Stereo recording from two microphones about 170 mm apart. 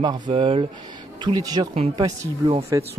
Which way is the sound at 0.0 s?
25° right (ahead or behind).